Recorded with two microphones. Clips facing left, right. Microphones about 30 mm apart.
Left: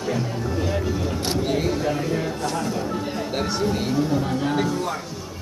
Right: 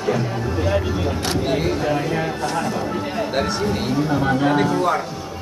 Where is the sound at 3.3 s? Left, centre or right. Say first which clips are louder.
Right 1 dB; centre.